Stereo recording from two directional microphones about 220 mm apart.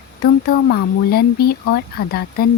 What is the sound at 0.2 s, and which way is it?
Speech, 45° left (ahead or behind).